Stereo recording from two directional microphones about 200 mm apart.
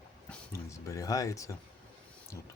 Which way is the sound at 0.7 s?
15° left (ahead or behind).